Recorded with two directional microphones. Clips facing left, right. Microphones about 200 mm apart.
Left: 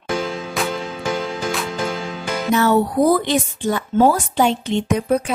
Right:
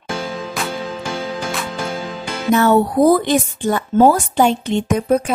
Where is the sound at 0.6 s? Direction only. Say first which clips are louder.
Left 3 dB; centre (ahead or behind).